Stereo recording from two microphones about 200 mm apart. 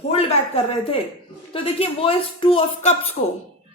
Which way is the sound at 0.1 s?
30° left (ahead or behind).